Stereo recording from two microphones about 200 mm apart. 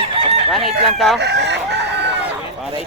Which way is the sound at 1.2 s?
60° right (ahead or behind).